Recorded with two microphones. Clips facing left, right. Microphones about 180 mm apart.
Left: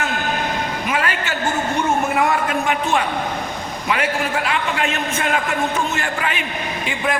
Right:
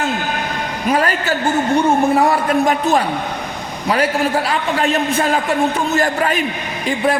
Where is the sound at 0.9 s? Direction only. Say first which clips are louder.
Right 8 dB; 40° right (ahead or behind).